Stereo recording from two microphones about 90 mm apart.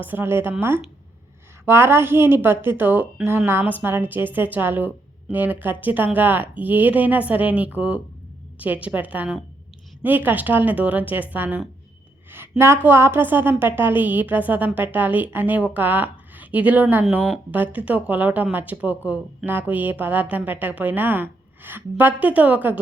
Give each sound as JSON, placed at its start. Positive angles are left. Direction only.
{"t": 0.0, "sound": "a woman's voice", "side_deg": -25}
{"t": 1.6, "sound": "a woman's voice", "side_deg": -25}